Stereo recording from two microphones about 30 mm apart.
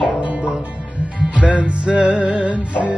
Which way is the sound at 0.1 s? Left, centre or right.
Right.